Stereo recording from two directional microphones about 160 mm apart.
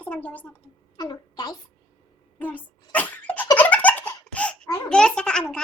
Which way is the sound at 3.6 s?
10° left (ahead or behind).